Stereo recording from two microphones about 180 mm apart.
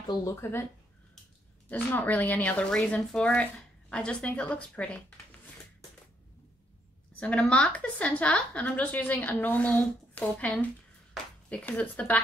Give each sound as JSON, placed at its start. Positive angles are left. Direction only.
{"t": 0.1, "sound": "a woman's voice", "side_deg": 20}
{"t": 1.7, "sound": "a woman's voice", "side_deg": 10}
{"t": 7.2, "sound": "a woman's voice", "side_deg": 5}